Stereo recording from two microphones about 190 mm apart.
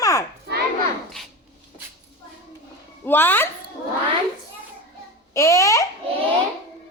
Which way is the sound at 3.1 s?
10° left (ahead or behind).